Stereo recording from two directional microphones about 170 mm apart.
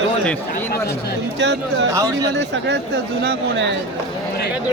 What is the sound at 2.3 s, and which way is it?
Speech, 90° right.